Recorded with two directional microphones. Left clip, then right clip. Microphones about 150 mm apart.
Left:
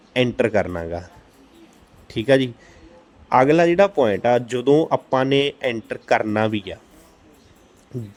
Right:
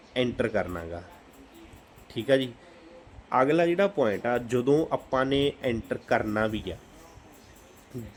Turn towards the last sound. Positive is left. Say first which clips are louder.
# left 7 dB
turn(degrees=30)  # may be behind; listen again after turning